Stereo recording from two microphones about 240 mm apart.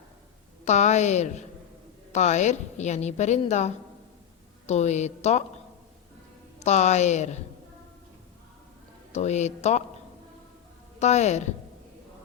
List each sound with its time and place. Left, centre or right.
0.6 s a woman's voice: left
6.6 s a woman's voice: left
9.1 s a woman's voice: left
11.0 s a woman's voice: left